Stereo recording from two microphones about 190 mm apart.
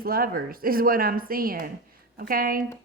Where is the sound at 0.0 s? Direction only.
50° right (ahead or behind).